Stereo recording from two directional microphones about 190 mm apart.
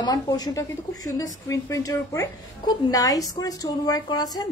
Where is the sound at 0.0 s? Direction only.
20° left (ahead or behind).